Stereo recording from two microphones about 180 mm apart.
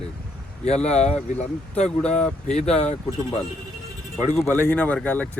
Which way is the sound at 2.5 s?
40° left (ahead or behind).